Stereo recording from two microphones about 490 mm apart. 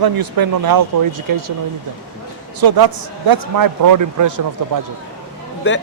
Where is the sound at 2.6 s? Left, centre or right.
Right.